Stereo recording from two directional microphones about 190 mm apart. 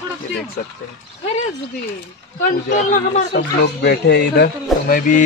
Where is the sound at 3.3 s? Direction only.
60° left (ahead or behind).